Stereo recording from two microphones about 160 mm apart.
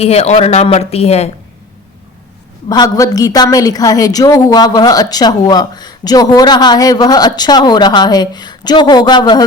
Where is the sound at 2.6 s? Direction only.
25° left (ahead or behind).